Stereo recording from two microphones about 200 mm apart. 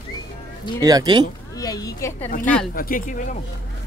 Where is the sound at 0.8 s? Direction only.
20° right (ahead or behind).